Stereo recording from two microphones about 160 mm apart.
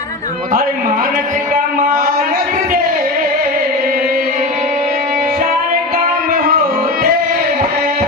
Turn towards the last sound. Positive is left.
turn(degrees=-65)  # may be behind; listen again after turning